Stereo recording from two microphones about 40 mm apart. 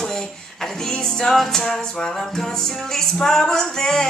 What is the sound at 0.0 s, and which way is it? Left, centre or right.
Music, centre.